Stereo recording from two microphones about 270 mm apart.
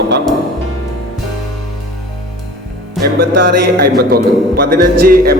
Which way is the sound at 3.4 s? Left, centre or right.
Right.